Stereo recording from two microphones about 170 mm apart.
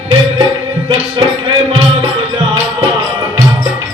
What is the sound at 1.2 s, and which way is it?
Music, 30° right (ahead or behind).